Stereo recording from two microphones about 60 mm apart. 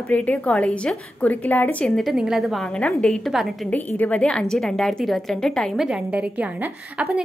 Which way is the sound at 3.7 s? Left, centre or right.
Left.